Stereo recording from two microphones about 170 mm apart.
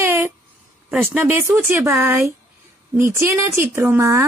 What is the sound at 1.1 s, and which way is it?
Speech, 10° right (ahead or behind).